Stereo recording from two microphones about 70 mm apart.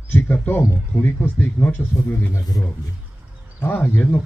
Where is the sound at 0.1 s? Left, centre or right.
Left.